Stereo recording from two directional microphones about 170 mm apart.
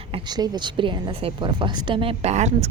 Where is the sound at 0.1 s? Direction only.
25° right (ahead or behind).